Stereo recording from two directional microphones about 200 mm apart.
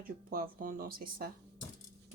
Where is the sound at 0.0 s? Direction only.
45° right (ahead or behind).